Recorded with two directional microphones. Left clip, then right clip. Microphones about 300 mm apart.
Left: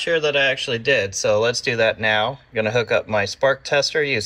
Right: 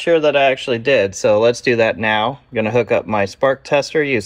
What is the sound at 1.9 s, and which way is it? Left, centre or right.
Speech, right.